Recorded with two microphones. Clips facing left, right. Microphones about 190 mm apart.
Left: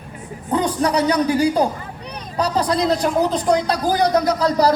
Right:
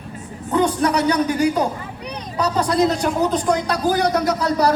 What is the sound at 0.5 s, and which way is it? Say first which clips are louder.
A man's voice: right 1 dB; 35° left (ahead or behind).